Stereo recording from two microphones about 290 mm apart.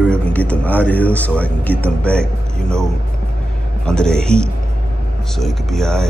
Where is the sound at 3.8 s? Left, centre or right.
Centre.